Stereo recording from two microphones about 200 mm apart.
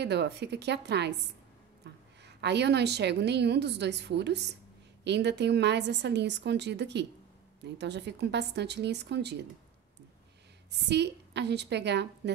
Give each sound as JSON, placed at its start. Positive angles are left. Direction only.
{"t": 0.0, "sound": "a woman's voice", "side_deg": -55}
{"t": 1.8, "sound": "a sound", "side_deg": -60}
{"t": 2.2, "sound": "a woman's voice", "side_deg": -60}
{"t": 10.7, "sound": "a woman's voice", "side_deg": -55}